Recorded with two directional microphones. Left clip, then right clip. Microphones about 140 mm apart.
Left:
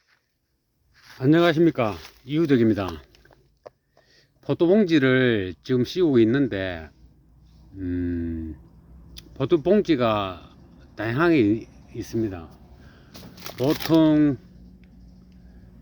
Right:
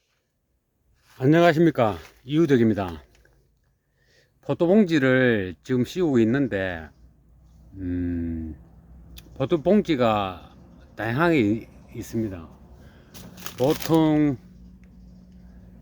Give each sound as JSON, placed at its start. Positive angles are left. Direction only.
{"t": 1.2, "sound": "speech", "side_deg": -20}
{"t": 2.6, "sound": "speech", "side_deg": 0}
{"t": 4.1, "sound": "speech", "side_deg": 0}
{"t": 7.8, "sound": "a sound", "side_deg": -5}
{"t": 9.1, "sound": "speech", "side_deg": -5}
{"t": 12.9, "sound": "a sound", "side_deg": -5}
{"t": 13.3, "sound": "speech", "side_deg": 5}